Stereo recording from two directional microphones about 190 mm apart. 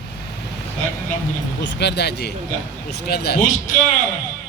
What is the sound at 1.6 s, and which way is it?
Speech, 65° left (ahead or behind).